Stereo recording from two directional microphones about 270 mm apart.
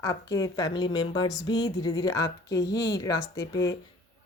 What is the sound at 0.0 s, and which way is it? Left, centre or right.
A woman's voice, centre.